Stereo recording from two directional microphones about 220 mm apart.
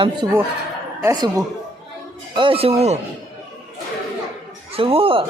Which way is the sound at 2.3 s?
25° right (ahead or behind).